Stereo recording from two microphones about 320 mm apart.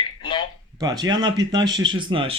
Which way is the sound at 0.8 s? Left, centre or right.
Centre.